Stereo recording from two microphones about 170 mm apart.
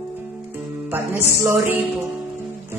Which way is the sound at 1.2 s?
15° right (ahead or behind).